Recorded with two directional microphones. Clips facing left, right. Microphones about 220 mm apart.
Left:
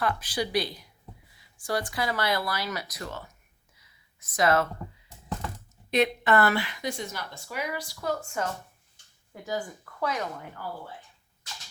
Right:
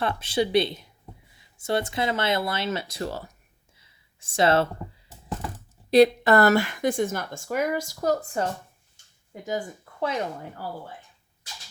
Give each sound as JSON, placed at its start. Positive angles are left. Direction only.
{"t": 0.0, "sound": "speech", "side_deg": -25}
{"t": 3.8, "sound": "a sound", "side_deg": -30}
{"t": 5.9, "sound": "a woman's voice", "side_deg": -35}
{"t": 9.3, "sound": "speech", "side_deg": -20}